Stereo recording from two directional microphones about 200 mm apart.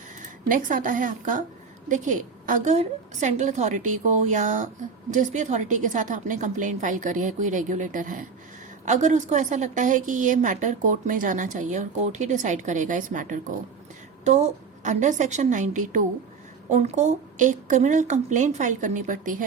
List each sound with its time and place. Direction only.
0.4 s a woman's voice: 40° right (ahead or behind)